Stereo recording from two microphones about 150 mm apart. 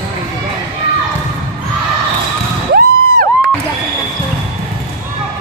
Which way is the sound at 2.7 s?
90° right.